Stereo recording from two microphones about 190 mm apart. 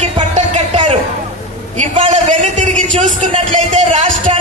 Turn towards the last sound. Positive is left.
turn(degrees=-40)  # may be behind; listen again after turning